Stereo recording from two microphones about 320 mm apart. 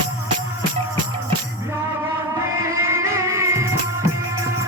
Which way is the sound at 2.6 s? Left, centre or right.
Centre.